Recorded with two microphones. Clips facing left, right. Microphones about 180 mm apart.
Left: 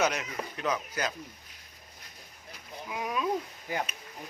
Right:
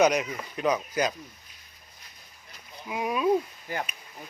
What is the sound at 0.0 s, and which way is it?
Speech, 15° right (ahead or behind).